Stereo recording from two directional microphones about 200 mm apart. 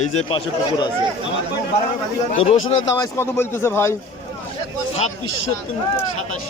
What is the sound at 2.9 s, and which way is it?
Speech, 15° left (ahead or behind).